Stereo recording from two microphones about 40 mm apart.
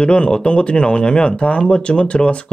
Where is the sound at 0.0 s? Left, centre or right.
Left.